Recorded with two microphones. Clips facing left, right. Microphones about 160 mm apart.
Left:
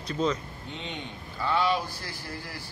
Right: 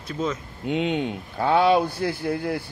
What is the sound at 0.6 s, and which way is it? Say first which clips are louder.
A man's voice: right 14 dB; 80° right.